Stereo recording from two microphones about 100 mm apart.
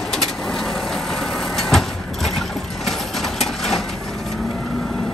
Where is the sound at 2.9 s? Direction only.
Centre (ahead or behind).